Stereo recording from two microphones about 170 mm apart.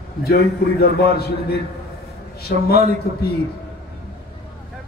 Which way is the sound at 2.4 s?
65° left (ahead or behind).